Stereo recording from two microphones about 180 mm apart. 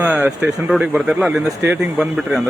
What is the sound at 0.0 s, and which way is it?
Speech, 10° right (ahead or behind).